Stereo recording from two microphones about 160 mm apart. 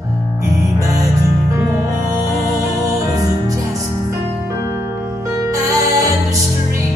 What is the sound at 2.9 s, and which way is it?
Music, 20° right (ahead or behind).